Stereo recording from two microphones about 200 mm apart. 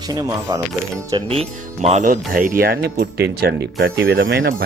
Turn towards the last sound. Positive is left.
turn(degrees=-50)  # may be behind; listen again after turning